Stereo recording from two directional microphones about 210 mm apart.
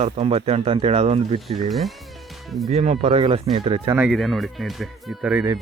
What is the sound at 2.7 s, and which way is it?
Speech, 30° right (ahead or behind).